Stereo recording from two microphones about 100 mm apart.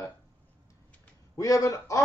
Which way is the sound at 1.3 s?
35° left (ahead or behind).